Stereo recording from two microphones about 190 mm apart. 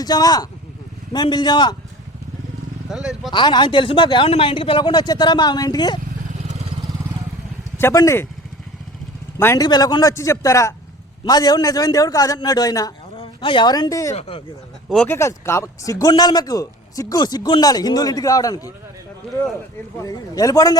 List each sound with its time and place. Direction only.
0.0 s speech: 20° left (ahead or behind)
2.9 s speech: centre (ahead or behind)
3.3 s speech: 25° left (ahead or behind)
6.5 s vehicle: 35° right (ahead or behind)
7.8 s a man's voice: 15° left (ahead or behind)
9.4 s a man's voice: 15° left (ahead or behind)
14.2 s speech: 30° left (ahead or behind)
14.8 s speech: 5° left (ahead or behind)
20.0 s speech: 20° left (ahead or behind)